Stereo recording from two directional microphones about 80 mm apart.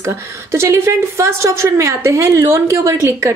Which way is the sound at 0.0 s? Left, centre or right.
Right.